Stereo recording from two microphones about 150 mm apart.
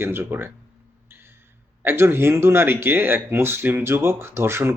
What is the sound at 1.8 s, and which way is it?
Speech, 15° right (ahead or behind).